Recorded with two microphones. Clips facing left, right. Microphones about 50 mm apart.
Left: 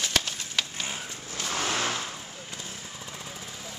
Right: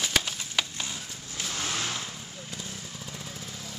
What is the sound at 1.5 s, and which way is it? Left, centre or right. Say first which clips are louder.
Vehicle: left 5 dB; left.